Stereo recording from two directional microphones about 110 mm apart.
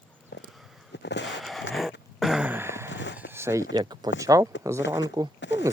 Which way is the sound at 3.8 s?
40° right (ahead or behind).